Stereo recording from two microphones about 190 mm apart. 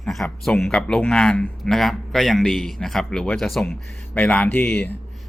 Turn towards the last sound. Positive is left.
turn(degrees=10)  # may be behind; listen again after turning